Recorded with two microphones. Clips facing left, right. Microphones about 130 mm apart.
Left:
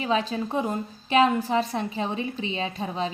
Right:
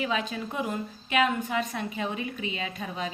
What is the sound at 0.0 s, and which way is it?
A woman's voice, 35° left (ahead or behind).